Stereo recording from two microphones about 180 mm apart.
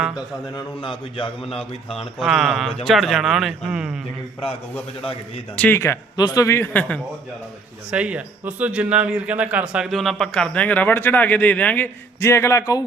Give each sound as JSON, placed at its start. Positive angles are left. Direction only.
{"t": 0.5, "sound": "a man's voice", "side_deg": 30}
{"t": 2.1, "sound": "a man's voice", "side_deg": 0}
{"t": 5.5, "sound": "a man's voice", "side_deg": 10}
{"t": 7.9, "sound": "a man's voice", "side_deg": -5}